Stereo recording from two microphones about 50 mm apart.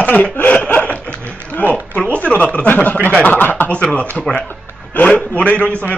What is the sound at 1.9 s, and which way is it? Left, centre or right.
A man's voice, left.